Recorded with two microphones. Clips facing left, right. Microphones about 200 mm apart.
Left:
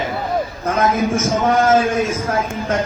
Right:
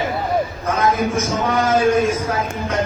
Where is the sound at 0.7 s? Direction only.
50° left (ahead or behind).